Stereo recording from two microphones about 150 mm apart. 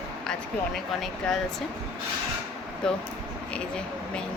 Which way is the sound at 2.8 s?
5° left (ahead or behind).